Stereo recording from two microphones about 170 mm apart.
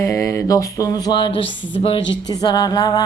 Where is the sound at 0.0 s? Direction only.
15° left (ahead or behind).